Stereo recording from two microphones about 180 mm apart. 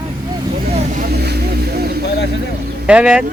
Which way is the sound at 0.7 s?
40° right (ahead or behind).